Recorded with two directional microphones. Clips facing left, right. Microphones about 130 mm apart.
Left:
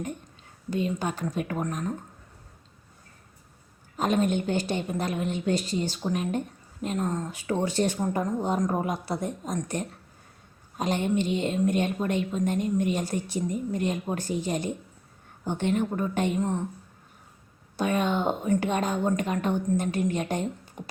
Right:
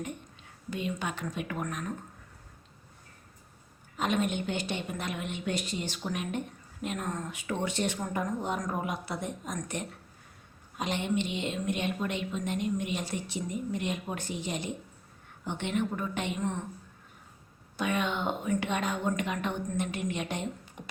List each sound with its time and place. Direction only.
0.7 s a woman's voice: 35° left (ahead or behind)
3.9 s a woman's voice: 40° left (ahead or behind)
17.7 s a woman's voice: 40° left (ahead or behind)